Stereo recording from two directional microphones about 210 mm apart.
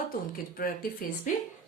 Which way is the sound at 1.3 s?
40° left (ahead or behind).